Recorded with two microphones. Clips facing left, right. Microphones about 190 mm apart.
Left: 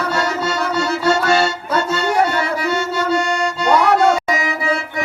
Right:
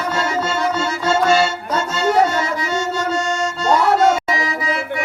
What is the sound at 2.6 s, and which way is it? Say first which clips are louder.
Accordion: left 2 dB; 65° left (ahead or behind).